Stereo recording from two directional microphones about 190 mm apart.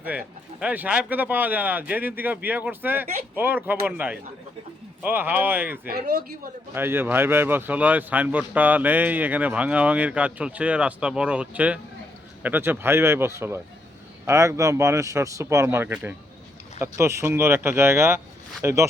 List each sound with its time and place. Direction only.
0.0 s speech: 5° right (ahead or behind)
5.9 s speech: 50° right (ahead or behind)
6.7 s speech: 10° right (ahead or behind)